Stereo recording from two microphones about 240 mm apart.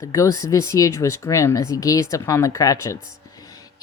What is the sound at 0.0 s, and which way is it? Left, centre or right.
Speech, centre.